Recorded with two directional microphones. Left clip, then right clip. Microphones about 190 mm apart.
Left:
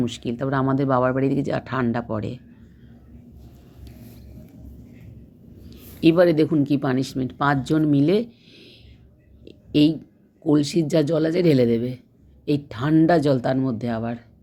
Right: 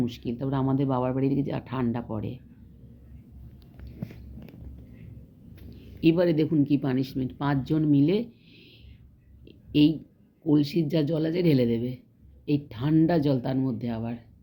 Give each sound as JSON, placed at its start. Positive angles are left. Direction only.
{"t": 0.0, "sound": "speech", "side_deg": 20}
{"t": 5.7, "sound": "speech", "side_deg": 20}
{"t": 9.4, "sound": "a sound", "side_deg": 25}
{"t": 10.4, "sound": "speech", "side_deg": 20}